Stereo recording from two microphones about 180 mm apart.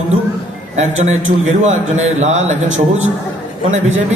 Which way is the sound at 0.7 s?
40° right (ahead or behind).